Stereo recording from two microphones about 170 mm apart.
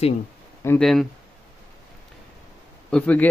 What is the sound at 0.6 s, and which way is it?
Speech, 5° left (ahead or behind).